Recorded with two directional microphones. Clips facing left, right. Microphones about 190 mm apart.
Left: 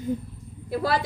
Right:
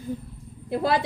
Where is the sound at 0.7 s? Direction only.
20° right (ahead or behind).